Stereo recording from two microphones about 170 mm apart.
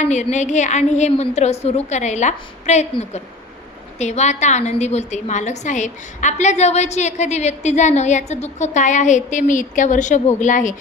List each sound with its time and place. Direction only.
0.0 s a woman's voice: 45° left (ahead or behind)